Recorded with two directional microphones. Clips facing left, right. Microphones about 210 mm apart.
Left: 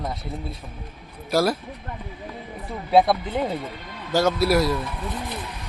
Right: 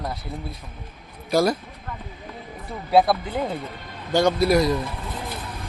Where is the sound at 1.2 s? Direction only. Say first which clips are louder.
Right 1 dB; 5° left (ahead or behind).